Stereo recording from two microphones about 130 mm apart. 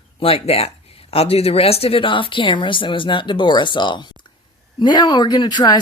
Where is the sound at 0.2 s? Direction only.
45° left (ahead or behind).